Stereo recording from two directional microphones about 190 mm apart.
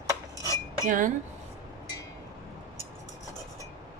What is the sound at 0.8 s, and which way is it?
Speech, 45° right (ahead or behind).